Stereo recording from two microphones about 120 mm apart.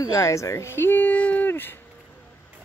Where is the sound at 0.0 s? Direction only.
25° left (ahead or behind).